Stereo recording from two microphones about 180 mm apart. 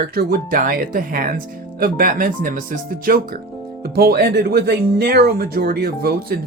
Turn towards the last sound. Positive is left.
turn(degrees=-55)  # may be behind; listen again after turning